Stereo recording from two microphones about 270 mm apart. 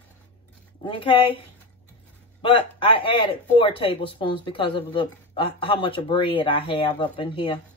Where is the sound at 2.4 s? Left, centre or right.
Centre.